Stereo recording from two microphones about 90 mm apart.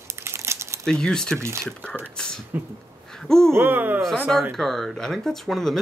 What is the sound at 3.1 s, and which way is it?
Speech, 5° left (ahead or behind).